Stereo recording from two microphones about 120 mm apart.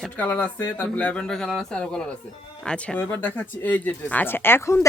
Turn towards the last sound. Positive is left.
turn(degrees=20)  # may be behind; listen again after turning